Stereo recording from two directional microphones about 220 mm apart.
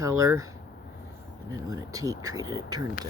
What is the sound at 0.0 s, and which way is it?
Speech, 15° right (ahead or behind).